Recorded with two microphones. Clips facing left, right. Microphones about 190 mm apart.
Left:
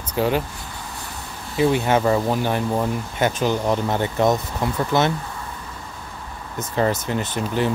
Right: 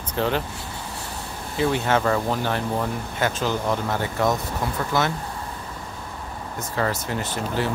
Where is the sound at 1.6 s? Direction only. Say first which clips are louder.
Left 3 dB; 15° left (ahead or behind).